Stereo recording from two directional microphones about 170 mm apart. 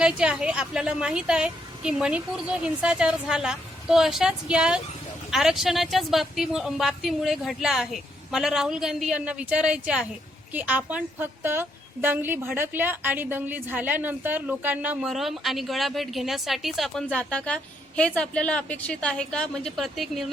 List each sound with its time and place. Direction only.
0.0 s a woman's voice: 5° right (ahead or behind)